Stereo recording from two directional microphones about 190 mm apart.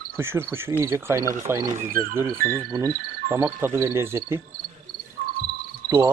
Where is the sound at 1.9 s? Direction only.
50° right (ahead or behind).